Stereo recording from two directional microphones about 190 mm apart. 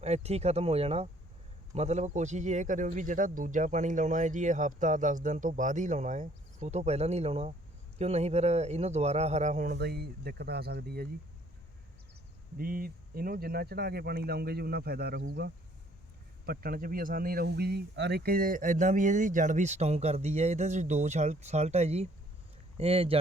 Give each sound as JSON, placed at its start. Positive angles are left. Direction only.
{"t": 0.0, "sound": "speech", "side_deg": -35}
{"t": 9.7, "sound": "speech", "side_deg": -60}
{"t": 12.5, "sound": "speech", "side_deg": -50}